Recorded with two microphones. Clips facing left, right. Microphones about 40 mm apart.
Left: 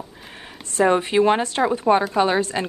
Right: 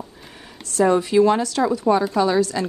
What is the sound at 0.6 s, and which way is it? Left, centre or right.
A woman's voice, left.